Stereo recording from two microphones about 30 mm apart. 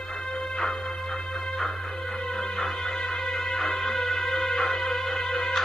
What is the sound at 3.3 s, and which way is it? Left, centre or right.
Music, centre.